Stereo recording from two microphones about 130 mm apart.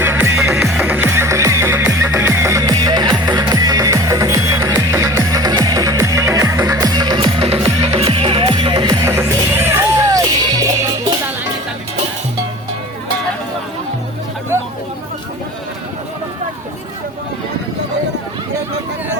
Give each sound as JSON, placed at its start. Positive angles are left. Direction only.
{"t": 0.0, "sound": "music", "side_deg": -15}
{"t": 0.5, "sound": "music", "side_deg": -5}
{"t": 9.0, "sound": "music", "side_deg": -20}